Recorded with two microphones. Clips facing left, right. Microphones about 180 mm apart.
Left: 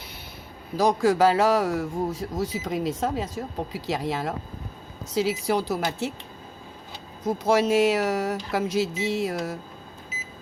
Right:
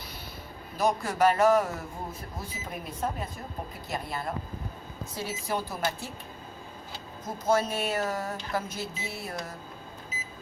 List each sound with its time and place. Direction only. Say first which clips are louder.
0.8 s a man's voice: left 6 dB; 90° left
7.4 s a man's voice: left 6 dB; 90° left